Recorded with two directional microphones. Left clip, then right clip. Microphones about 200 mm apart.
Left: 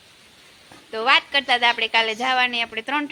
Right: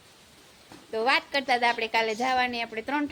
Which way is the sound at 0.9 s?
Centre (ahead or behind).